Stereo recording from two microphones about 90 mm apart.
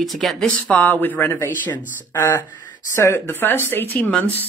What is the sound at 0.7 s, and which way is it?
Speech, 20° left (ahead or behind).